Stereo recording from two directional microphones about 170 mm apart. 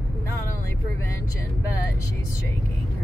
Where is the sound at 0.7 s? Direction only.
15° left (ahead or behind).